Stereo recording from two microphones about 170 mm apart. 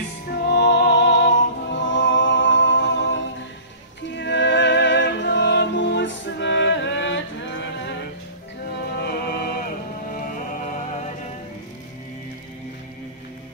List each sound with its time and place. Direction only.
0.3 s music: 75° left (ahead or behind); by 8.0 s 90° left
8.7 s music: 70° left (ahead or behind); by 11.1 s 45° left (ahead or behind)